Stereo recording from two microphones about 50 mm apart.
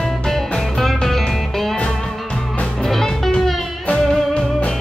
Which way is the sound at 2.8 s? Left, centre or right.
Centre.